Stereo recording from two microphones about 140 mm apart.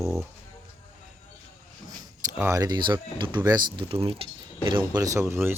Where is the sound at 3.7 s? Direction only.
45° right (ahead or behind).